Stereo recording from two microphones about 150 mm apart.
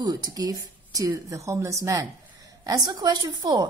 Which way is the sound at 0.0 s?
25° right (ahead or behind).